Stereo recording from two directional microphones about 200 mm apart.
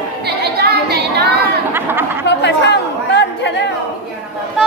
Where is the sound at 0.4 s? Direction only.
55° right (ahead or behind).